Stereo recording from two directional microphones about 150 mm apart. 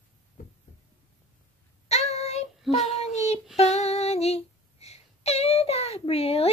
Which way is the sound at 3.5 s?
45° left (ahead or behind).